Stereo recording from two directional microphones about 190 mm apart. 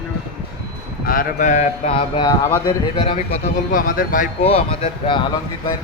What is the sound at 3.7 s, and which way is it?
Speech, 45° left (ahead or behind).